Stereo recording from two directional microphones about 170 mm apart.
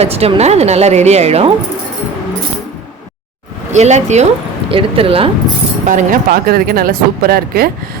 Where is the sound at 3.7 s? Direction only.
45° right (ahead or behind).